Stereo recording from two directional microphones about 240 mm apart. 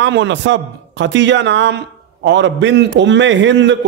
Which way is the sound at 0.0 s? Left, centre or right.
Right.